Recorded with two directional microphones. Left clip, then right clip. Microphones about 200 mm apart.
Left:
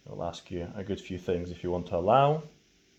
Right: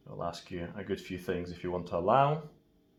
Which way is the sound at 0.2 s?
50° left (ahead or behind).